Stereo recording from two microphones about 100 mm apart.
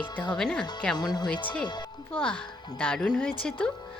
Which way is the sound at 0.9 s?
45° left (ahead or behind).